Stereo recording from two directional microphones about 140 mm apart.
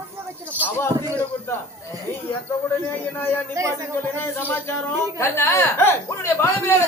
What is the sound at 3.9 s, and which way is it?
Speech, 15° left (ahead or behind).